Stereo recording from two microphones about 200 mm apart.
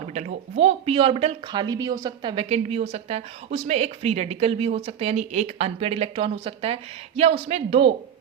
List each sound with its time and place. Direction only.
0.1 s speech: 35° right (ahead or behind)